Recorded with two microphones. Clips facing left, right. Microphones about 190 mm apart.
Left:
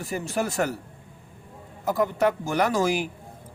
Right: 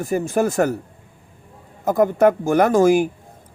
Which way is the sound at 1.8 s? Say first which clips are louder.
Right 7 dB; 50° right (ahead or behind).